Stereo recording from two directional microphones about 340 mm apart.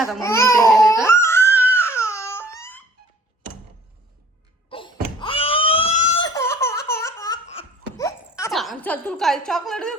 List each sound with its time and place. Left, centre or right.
0.2 s baby cry: centre
0.9 s crying: centre
4.7 s wail: centre
6.3 s baby laughter: centre
7.4 s giggle: centre